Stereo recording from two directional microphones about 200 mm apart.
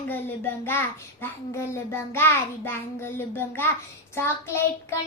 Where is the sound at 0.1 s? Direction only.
10° left (ahead or behind).